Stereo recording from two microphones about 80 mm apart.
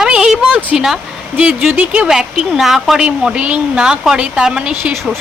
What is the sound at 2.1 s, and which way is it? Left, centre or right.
A woman's voice, centre.